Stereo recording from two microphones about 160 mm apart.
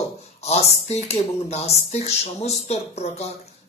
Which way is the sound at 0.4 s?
40° left (ahead or behind).